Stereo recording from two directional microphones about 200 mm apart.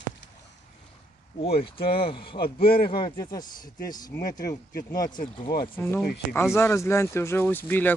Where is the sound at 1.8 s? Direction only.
25° left (ahead or behind).